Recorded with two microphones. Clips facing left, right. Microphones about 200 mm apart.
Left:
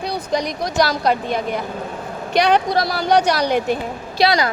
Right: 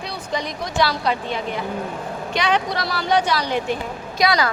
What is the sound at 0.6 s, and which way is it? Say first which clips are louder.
Speech: left 1 dB; 45° left (ahead or behind).